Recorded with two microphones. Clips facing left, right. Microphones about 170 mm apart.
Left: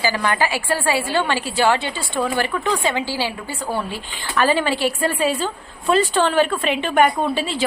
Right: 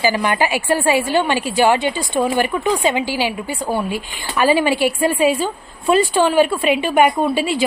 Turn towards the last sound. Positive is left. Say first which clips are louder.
# right 4 dB
turn(degrees=-10)  # may be behind; listen again after turning